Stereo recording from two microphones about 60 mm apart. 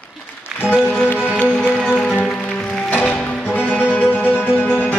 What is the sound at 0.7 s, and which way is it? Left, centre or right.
Music, left.